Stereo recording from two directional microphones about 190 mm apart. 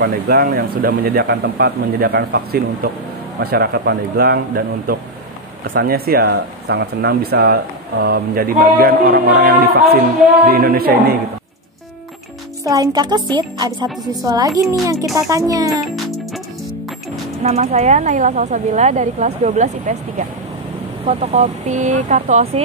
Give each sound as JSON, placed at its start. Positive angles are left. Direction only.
{"t": 0.0, "sound": "speech", "side_deg": -55}
{"t": 12.6, "sound": "speech", "side_deg": -20}
{"t": 17.4, "sound": "speech", "side_deg": -35}